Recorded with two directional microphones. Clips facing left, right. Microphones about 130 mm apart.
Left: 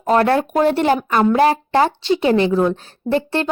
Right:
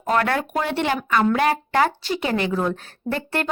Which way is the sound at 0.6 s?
40° left (ahead or behind).